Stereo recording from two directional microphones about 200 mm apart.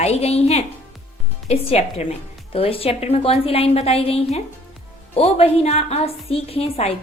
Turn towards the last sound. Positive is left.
turn(degrees=30)  # may be behind; listen again after turning